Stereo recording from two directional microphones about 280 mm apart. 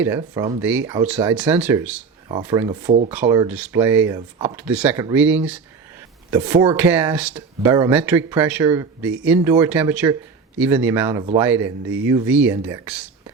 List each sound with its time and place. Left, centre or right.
0.0 s speech: centre
2.3 s speech: centre